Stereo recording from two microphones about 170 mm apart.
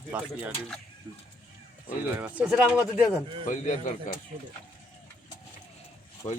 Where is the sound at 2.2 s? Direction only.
10° right (ahead or behind).